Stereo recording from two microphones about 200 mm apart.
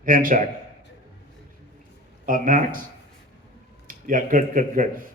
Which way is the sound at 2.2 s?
40° right (ahead or behind).